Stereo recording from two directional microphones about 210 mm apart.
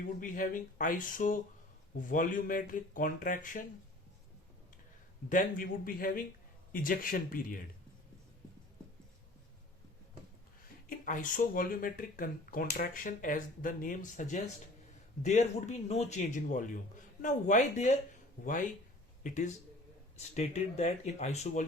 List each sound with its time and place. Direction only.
0.2 s speech: 40° left (ahead or behind)
5.3 s a man's voice: 40° left (ahead or behind)
10.8 s speech: 40° left (ahead or behind)